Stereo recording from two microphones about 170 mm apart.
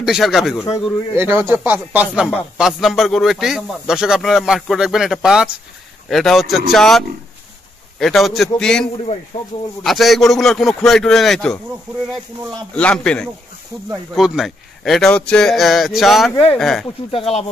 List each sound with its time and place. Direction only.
0.0 s speech: centre (ahead or behind)
1.1 s speech: 15° right (ahead or behind); by 8.8 s 5° left (ahead or behind)
9.3 s speech: 35° left (ahead or behind)
9.8 s speech: centre (ahead or behind)
12.7 s speech: 5° left (ahead or behind)
17.1 s speech: 35° left (ahead or behind)